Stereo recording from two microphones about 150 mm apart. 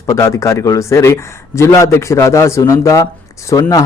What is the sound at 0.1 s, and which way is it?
A man's voice, 20° left (ahead or behind).